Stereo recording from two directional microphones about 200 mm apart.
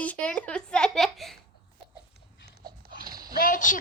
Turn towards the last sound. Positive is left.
turn(degrees=40)  # may be behind; listen again after turning